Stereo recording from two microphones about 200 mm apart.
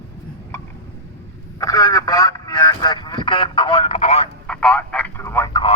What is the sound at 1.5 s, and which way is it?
Telephone, 20° left (ahead or behind).